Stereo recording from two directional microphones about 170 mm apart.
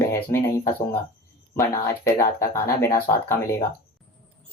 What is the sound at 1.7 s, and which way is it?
A woman's voice, 15° left (ahead or behind).